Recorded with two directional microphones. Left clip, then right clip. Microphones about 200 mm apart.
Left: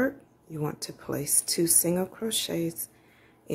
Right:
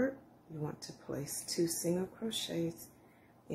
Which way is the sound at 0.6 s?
50° left (ahead or behind).